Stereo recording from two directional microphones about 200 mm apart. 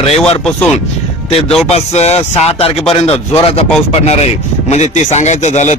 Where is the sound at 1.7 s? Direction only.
30° left (ahead or behind).